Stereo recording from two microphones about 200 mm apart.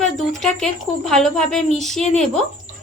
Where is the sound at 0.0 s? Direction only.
Centre (ahead or behind).